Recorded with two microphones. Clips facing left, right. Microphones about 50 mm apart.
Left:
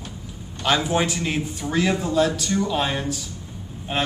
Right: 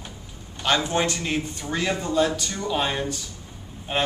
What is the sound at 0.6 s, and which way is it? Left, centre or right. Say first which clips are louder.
Speech: left 2 dB; centre.